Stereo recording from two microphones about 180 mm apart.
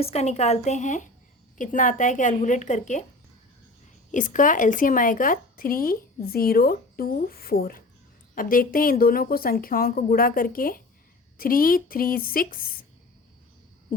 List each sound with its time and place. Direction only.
0.0 s a woman's voice: 35° left (ahead or behind)
4.1 s a woman's voice: 45° left (ahead or behind)